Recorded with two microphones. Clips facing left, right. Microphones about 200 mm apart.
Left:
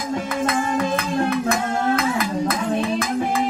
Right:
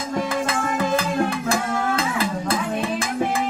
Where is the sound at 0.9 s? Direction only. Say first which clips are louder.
Left 1 dB; 30° right (ahead or behind).